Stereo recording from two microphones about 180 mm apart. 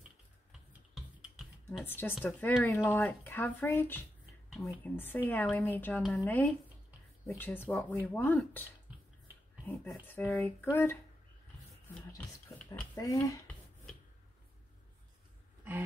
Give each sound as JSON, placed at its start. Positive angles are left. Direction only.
{"t": 0.5, "sound": "computer keyboard", "side_deg": 0}
{"t": 1.9, "sound": "speech", "side_deg": 10}
{"t": 10.0, "sound": "speech", "side_deg": 10}
{"t": 12.5, "sound": "speech", "side_deg": 5}
{"t": 13.0, "sound": "speech", "side_deg": 20}